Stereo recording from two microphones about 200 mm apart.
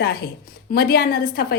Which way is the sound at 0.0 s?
50° left (ahead or behind).